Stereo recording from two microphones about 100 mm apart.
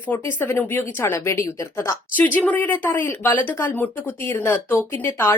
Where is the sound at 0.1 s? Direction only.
20° left (ahead or behind).